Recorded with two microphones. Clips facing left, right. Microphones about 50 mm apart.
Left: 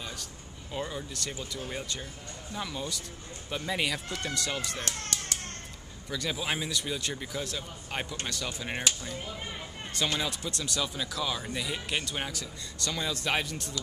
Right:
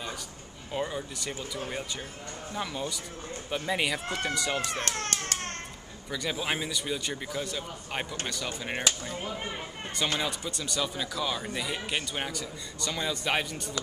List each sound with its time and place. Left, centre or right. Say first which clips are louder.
0.7 s speech: right 3 dB; centre
4.7 s a sound: right 4 dB; right
6.0 s speech: right 1 dB; centre